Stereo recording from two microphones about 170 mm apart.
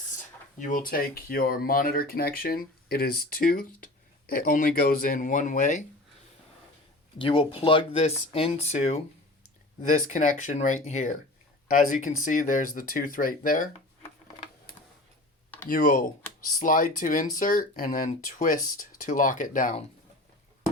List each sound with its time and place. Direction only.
0.6 s speech: 55° left (ahead or behind)
7.2 s speech: 30° left (ahead or behind)
9.8 s speech: 50° left (ahead or behind)
15.7 s speech: 55° left (ahead or behind)